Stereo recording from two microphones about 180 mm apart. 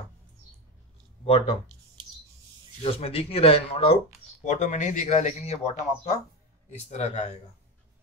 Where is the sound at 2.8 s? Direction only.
30° left (ahead or behind).